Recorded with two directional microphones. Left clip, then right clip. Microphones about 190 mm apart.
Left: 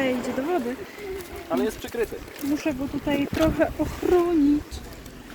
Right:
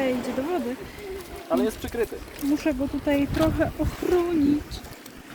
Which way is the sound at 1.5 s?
30° right (ahead or behind).